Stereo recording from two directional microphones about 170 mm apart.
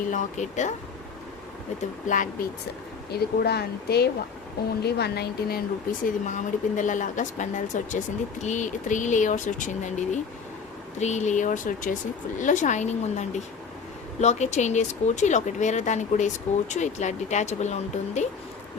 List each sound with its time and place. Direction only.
0.1 s speech: 45° left (ahead or behind)
2.0 s speech: 50° left (ahead or behind)
3.1 s speech: 70° left (ahead or behind)
6.1 s speech: 45° left (ahead or behind)